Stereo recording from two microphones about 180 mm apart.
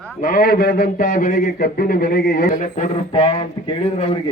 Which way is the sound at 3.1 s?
30° left (ahead or behind).